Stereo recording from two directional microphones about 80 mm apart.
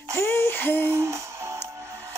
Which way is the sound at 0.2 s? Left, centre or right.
Left.